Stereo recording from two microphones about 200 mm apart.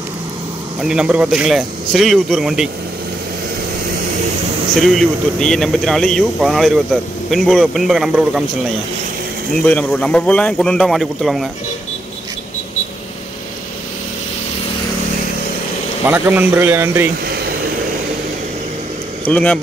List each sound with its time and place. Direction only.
0.7 s speech: 5° right (ahead or behind)
4.8 s speech: centre (ahead or behind)
9.7 s speech: 5° left (ahead or behind)
16.1 s speech: 10° right (ahead or behind)
17.3 s vehicle: 50° right (ahead or behind)
19.2 s speech: 5° left (ahead or behind)